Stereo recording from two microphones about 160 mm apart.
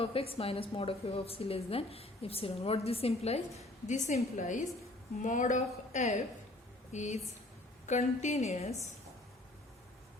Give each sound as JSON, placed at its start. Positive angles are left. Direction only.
{"t": 0.0, "sound": "a woman's voice", "side_deg": 35}